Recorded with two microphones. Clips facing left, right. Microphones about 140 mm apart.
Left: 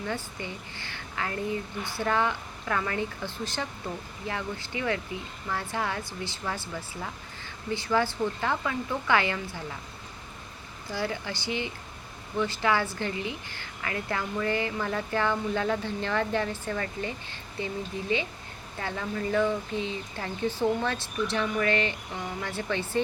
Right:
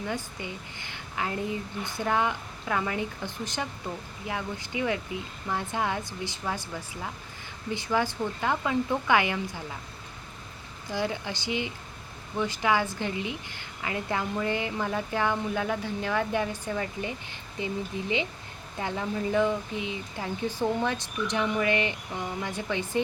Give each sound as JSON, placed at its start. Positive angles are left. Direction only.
{"t": 0.1, "sound": "a woman's voice", "side_deg": -15}
{"t": 10.8, "sound": "a woman's voice", "side_deg": -20}